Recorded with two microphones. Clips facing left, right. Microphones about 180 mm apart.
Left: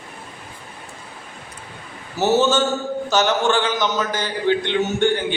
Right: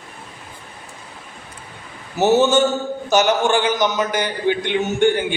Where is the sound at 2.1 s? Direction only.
15° right (ahead or behind).